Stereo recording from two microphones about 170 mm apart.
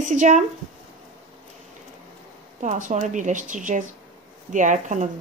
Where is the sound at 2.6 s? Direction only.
45° right (ahead or behind).